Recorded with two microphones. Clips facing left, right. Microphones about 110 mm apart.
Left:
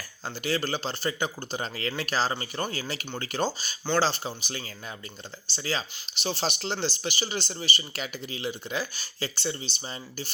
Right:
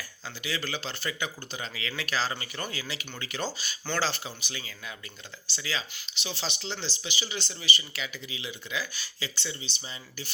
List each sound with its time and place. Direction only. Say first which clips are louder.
0.3 s speech: left 6 dB; 40° left (ahead or behind)